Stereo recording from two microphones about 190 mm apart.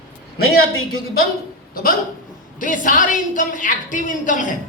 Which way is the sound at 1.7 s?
50° left (ahead or behind).